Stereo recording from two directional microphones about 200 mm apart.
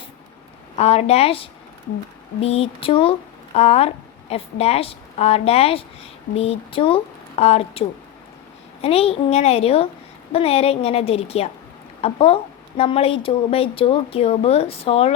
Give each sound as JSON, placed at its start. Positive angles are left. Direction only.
{"t": 0.8, "sound": "a woman's voice", "side_deg": 30}